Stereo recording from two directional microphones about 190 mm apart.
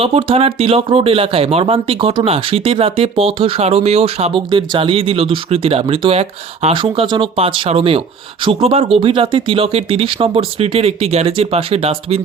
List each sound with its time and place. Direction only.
0.0 s speech: 30° right (ahead or behind)